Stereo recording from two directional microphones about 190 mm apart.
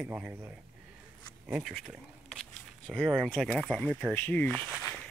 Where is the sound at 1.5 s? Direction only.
Centre (ahead or behind).